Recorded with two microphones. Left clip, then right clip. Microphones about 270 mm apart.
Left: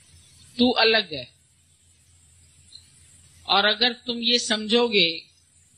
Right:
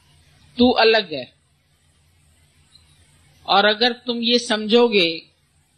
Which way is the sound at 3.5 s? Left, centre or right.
Left.